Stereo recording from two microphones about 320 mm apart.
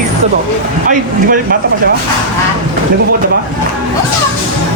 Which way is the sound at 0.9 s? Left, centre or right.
Right.